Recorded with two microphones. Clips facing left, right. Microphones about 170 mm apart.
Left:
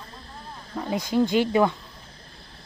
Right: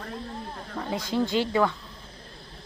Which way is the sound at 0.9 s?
15° left (ahead or behind).